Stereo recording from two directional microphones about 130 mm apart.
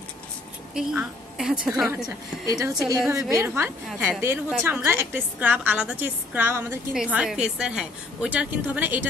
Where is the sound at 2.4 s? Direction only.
25° right (ahead or behind).